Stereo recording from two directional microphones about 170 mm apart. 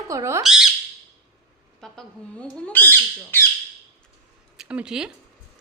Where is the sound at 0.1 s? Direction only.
15° right (ahead or behind).